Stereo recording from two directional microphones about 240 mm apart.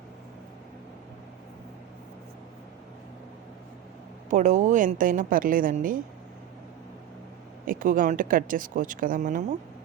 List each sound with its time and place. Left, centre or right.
4.3 s speech: right
7.6 s speech: right